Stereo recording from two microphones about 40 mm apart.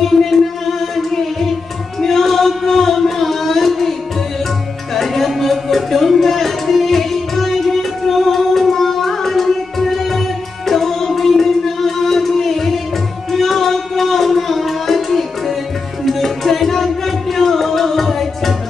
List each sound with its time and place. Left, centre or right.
0.0 s music: centre
2.0 s a sound: centre
4.9 s music: centre